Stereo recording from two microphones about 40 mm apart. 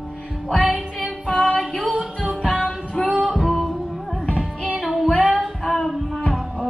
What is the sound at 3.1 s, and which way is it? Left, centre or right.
Music, centre.